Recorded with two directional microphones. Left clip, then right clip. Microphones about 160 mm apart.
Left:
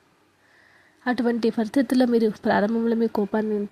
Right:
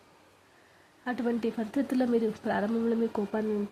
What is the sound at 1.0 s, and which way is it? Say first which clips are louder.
A woman's voice: left 8 dB; 30° left (ahead or behind).